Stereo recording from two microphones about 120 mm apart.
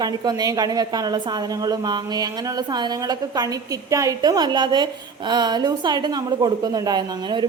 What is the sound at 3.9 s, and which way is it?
A woman's voice, 30° right (ahead or behind).